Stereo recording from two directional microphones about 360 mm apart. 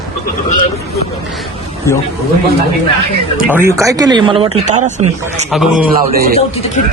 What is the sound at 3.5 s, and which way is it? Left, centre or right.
Speech, centre.